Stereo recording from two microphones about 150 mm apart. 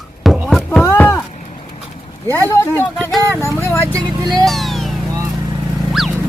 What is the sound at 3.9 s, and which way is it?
Speech, 30° right (ahead or behind).